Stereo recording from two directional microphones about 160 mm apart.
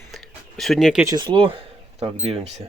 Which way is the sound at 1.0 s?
25° right (ahead or behind).